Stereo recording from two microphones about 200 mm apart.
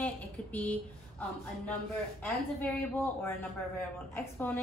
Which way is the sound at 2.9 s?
10° left (ahead or behind).